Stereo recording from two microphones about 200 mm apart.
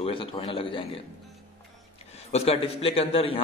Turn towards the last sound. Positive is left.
turn(degrees=30)  # may be behind; listen again after turning